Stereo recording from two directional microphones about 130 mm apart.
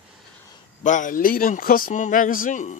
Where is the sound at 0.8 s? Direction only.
75° left (ahead or behind).